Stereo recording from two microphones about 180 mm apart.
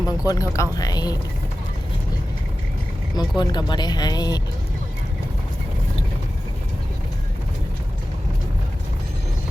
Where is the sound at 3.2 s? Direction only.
25° left (ahead or behind).